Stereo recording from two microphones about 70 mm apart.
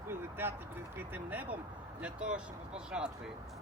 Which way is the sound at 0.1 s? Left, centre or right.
Right.